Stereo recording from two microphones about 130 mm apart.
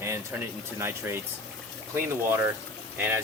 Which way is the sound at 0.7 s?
20° right (ahead or behind).